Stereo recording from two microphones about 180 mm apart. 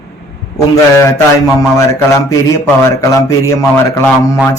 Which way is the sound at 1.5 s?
15° left (ahead or behind).